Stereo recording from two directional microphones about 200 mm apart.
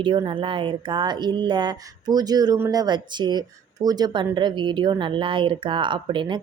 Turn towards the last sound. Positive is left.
turn(degrees=-25)  # may be behind; listen again after turning